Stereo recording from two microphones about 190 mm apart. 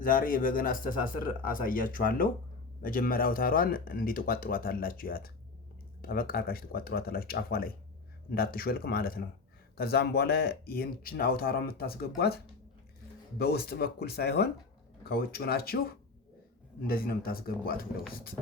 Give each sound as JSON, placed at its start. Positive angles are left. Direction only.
{"t": 0.0, "sound": "speech", "side_deg": 45}
{"t": 13.4, "sound": "speech", "side_deg": 55}